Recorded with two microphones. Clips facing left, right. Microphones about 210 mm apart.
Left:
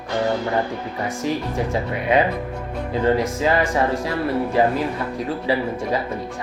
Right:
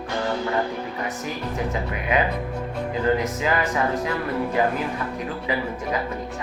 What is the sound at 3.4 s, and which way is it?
Speech, 30° left (ahead or behind).